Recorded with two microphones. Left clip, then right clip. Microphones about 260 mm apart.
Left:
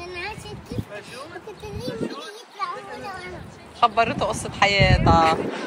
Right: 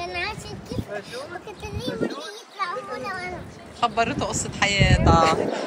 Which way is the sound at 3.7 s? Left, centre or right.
Centre.